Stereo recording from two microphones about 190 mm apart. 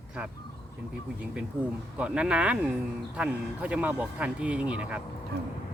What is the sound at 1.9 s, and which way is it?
Speech, 5° right (ahead or behind).